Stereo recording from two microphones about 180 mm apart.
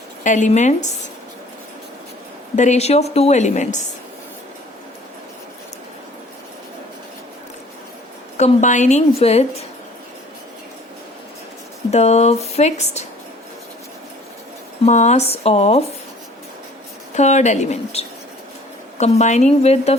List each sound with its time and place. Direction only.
0.3 s a woman's voice: 45° left (ahead or behind)
2.6 s a woman's voice: 40° left (ahead or behind)
8.4 s a woman's voice: 40° left (ahead or behind)
11.9 s a woman's voice: 35° left (ahead or behind)
14.8 s a woman's voice: 40° left (ahead or behind)
17.2 s a woman's voice: 40° left (ahead or behind)